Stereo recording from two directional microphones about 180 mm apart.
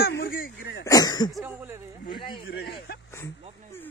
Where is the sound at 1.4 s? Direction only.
15° right (ahead or behind).